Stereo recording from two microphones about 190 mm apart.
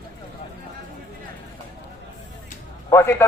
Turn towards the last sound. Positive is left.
turn(degrees=15)  # may be behind; listen again after turning